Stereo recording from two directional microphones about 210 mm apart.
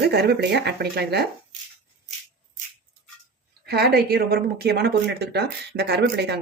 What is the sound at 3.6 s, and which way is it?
Speech, 50° right (ahead or behind).